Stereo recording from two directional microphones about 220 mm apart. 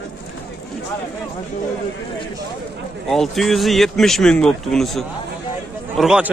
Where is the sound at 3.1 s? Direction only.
Centre (ahead or behind).